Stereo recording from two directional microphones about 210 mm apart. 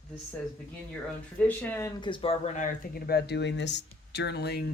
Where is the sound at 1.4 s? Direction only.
10° left (ahead or behind).